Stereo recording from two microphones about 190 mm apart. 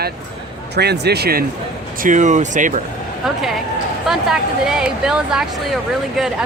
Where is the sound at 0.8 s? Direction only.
60° right (ahead or behind).